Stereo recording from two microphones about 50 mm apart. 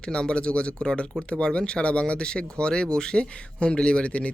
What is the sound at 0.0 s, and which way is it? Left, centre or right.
Speech, centre.